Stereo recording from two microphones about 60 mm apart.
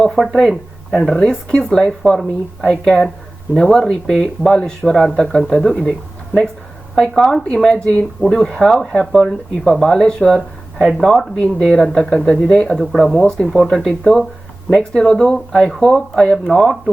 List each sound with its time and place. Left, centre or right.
0.0 s speech: centre
6.9 s speech: centre
13.5 s speech: centre